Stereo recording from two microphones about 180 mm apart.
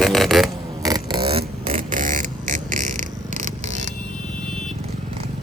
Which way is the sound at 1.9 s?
45° right (ahead or behind).